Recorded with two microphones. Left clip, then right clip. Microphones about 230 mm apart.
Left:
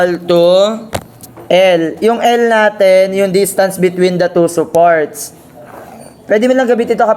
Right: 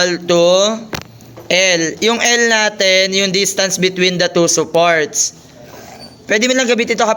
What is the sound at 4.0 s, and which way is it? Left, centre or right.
Speech, centre.